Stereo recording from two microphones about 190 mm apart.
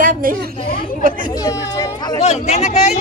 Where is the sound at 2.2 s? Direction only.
35° left (ahead or behind).